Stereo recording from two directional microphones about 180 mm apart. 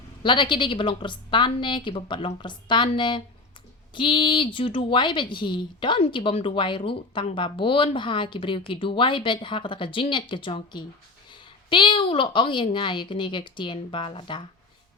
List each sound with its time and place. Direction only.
0.2 s a woman's voice: 25° left (ahead or behind)